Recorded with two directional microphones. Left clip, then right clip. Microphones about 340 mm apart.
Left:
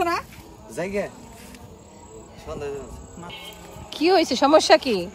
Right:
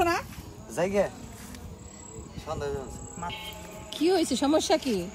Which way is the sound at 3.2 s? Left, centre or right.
Centre.